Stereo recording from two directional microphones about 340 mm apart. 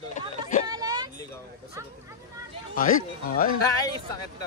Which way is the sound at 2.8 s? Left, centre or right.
Left.